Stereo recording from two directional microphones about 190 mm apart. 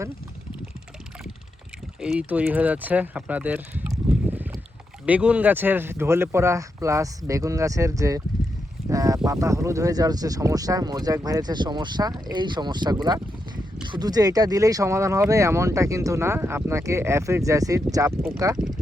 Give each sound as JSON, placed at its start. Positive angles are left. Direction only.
{"t": 2.0, "sound": "speech", "side_deg": -5}